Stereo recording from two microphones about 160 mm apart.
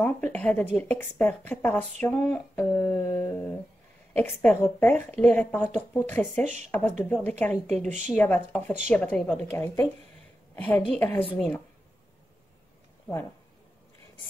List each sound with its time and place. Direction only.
0.0 s speech: 10° left (ahead or behind)
6.4 s speech: 50° right (ahead or behind)
6.7 s speech: 10° left (ahead or behind)